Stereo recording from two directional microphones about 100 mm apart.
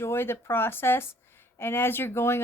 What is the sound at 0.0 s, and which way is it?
A woman's voice, 25° left (ahead or behind).